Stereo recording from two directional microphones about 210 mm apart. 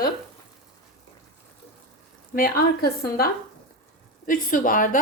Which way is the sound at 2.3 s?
45° left (ahead or behind).